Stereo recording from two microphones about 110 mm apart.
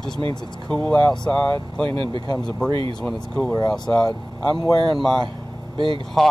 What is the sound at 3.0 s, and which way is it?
Speech, centre (ahead or behind).